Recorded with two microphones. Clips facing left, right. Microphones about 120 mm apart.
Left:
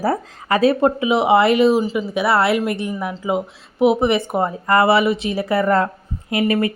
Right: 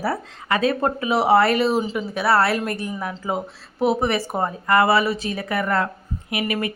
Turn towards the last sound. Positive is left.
turn(degrees=25)  # may be behind; listen again after turning